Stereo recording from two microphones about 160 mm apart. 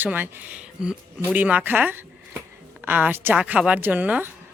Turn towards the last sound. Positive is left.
turn(degrees=-10)  # may be behind; listen again after turning